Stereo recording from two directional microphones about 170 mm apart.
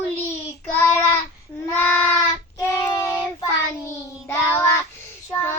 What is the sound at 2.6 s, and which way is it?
Child singing, 20° left (ahead or behind).